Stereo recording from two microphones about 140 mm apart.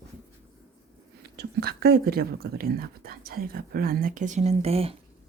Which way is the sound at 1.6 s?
90° right.